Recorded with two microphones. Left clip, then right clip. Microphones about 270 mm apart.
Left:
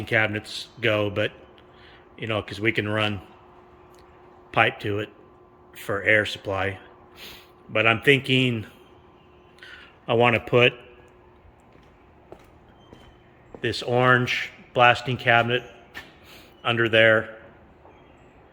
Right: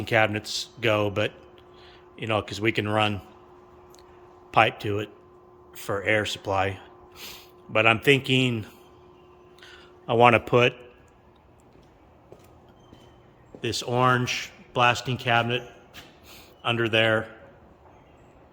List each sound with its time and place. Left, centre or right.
0.0 s a man's voice: centre
4.5 s a man's voice: centre
9.6 s a sound: centre
13.6 s a man's voice: centre
16.6 s a man's voice: centre